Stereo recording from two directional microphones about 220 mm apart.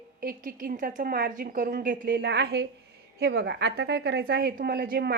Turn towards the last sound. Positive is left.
turn(degrees=-45)  # may be behind; listen again after turning